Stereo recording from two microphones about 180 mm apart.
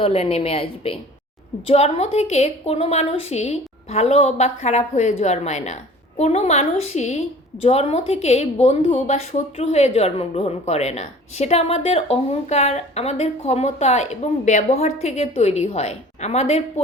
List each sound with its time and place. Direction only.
0.0 s a woman's voice: 35° left (ahead or behind)